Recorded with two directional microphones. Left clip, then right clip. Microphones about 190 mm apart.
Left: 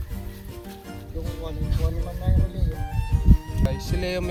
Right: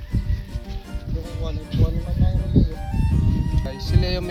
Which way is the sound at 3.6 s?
20° left (ahead or behind).